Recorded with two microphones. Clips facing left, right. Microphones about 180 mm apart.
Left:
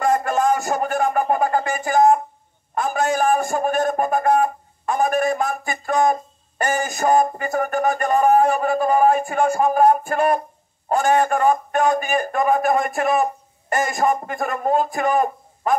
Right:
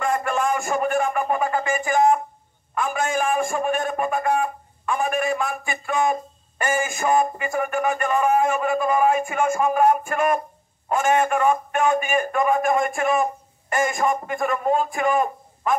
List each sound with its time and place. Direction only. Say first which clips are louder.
0.0 s a man's voice: left 4 dB; 40° left (ahead or behind)